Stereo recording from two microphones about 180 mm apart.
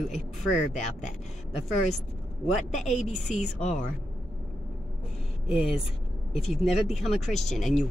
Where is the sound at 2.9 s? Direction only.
40° left (ahead or behind).